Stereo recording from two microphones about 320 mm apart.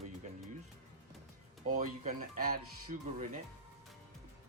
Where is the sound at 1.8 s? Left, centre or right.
Right.